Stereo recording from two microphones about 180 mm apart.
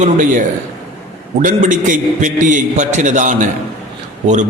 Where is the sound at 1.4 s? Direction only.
45° right (ahead or behind).